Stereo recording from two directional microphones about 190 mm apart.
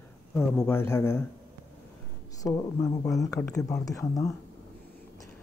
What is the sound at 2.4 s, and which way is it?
Speech, 20° left (ahead or behind).